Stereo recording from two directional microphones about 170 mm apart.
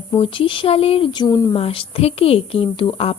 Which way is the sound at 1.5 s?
35° left (ahead or behind).